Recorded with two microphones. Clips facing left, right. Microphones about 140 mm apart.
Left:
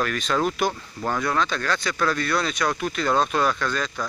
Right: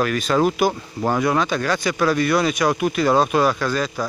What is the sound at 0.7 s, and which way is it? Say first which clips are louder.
Speech: right 6 dB; 25° right (ahead or behind).